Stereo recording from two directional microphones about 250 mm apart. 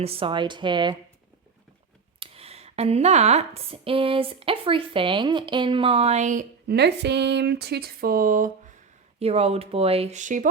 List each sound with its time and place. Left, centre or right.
0.0 s a woman's voice: right
2.1 s a woman's voice: right